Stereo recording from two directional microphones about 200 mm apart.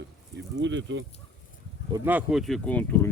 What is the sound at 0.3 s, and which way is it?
Speech, 65° right (ahead or behind).